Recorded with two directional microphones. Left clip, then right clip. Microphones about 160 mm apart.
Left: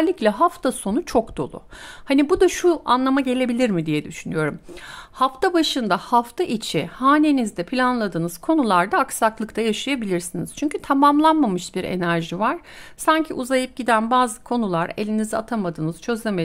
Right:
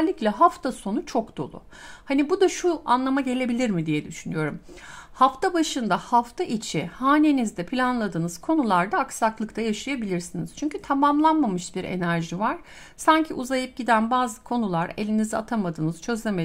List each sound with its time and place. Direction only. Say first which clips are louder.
0.0 s speech: left 2 dB; 30° left (ahead or behind)